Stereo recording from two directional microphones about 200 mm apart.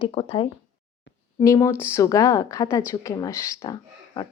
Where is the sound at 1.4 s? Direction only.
15° left (ahead or behind).